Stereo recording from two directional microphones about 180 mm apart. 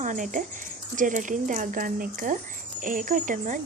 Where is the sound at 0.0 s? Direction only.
45° right (ahead or behind).